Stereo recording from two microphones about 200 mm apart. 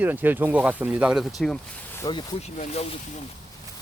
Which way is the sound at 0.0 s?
10° right (ahead or behind).